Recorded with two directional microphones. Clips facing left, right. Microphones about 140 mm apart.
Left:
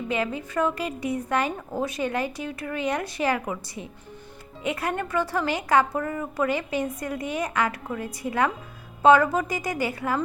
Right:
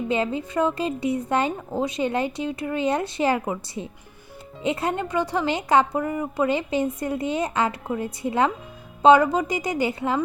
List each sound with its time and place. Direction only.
0.1 s speech: 25° right (ahead or behind)